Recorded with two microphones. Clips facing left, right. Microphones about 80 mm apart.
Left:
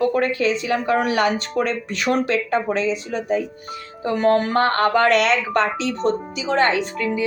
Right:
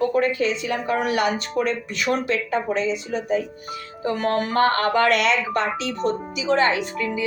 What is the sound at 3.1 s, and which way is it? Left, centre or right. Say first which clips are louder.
Speech: left 1 dB; left.